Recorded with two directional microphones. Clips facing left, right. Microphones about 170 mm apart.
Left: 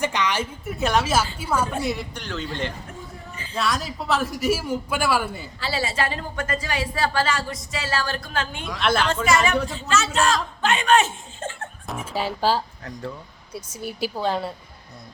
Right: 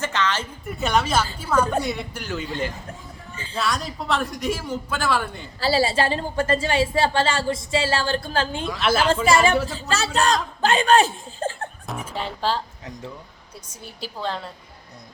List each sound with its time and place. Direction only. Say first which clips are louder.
0.0 s a woman's voice: left 1 dB; 15° left (ahead or behind)
0.6 s a woman's voice: right 1 dB; centre (ahead or behind)
5.5 s a woman's voice: right 6 dB; 35° right (ahead or behind)
8.6 s a woman's voice: left 1 dB; centre (ahead or behind)
9.2 s a woman's voice: right 2 dB; 30° right (ahead or behind)
11.9 s a woman's voice: left 4 dB; 5° left (ahead or behind)